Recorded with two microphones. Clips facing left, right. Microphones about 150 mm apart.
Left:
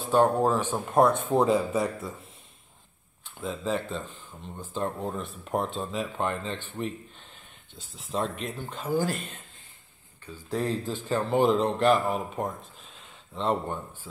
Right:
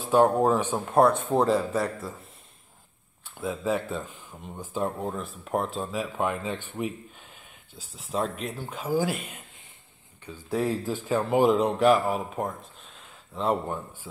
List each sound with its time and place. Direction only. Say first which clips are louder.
0.1 s speech: right 2 dB; 10° right (ahead or behind)
0.8 s speech: right 1 dB; centre (ahead or behind)
3.3 s speech: right 2 dB; 10° right (ahead or behind)
10.5 s speech: right 2 dB; 10° right (ahead or behind)